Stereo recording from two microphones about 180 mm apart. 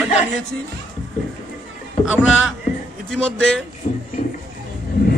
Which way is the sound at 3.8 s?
45° left (ahead or behind).